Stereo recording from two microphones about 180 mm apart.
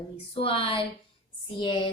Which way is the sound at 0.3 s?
30° left (ahead or behind).